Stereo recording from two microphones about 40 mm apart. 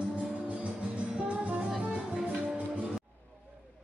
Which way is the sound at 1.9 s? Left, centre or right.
Centre.